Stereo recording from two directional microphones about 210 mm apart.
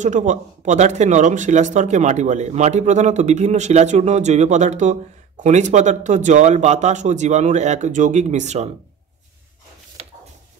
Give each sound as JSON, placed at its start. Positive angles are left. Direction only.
{"t": 0.0, "sound": "speech", "side_deg": -35}